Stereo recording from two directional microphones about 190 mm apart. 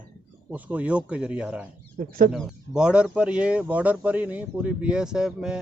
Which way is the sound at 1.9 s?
50° right (ahead or behind).